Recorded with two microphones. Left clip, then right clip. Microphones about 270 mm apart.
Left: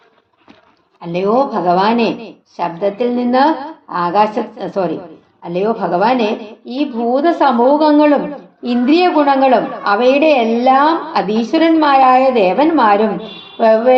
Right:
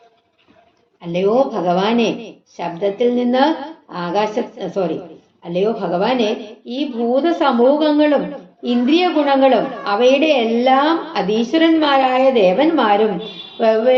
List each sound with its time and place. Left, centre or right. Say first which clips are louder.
1.0 s a woman's voice: left 1 dB; left